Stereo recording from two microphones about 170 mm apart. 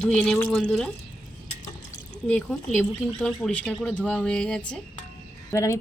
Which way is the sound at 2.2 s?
5° left (ahead or behind).